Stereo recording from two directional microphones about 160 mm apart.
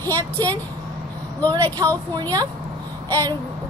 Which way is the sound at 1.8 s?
20° right (ahead or behind).